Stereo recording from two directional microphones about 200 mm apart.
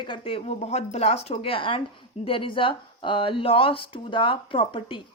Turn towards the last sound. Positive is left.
turn(degrees=25)  # may be behind; listen again after turning